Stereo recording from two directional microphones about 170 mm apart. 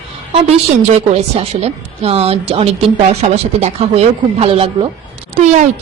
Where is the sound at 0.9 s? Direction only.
40° right (ahead or behind).